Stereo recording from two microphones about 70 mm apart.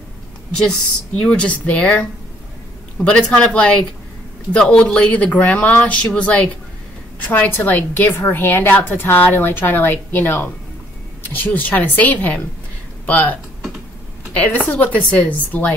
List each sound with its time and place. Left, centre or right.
0.6 s a woman's voice: centre